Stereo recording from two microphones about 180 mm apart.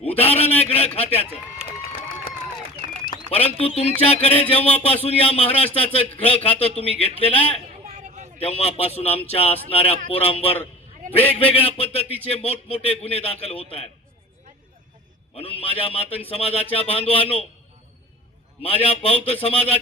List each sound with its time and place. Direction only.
0.2 s speech: 35° left (ahead or behind)
3.1 s speech: 35° left (ahead or behind)
7.9 s vehicle: 40° right (ahead or behind)
8.4 s speech: 35° left (ahead or behind)
15.4 s speech: 30° left (ahead or behind)
18.6 s speech: 35° left (ahead or behind)